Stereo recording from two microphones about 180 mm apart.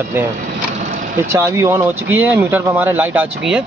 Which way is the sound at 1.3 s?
15° right (ahead or behind).